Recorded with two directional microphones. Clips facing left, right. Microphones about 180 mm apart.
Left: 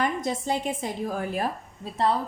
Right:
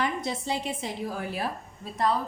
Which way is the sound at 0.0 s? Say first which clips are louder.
Left 3 dB; 50° left (ahead or behind).